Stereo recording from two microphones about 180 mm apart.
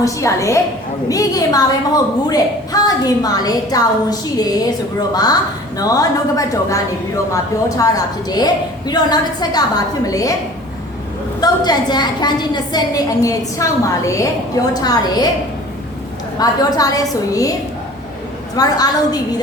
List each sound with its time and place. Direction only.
0.0 s a woman's voice: 15° left (ahead or behind)
11.3 s a woman's voice: 20° left (ahead or behind)
16.4 s a woman's voice: 20° left (ahead or behind)
18.5 s a woman's voice: 20° left (ahead or behind)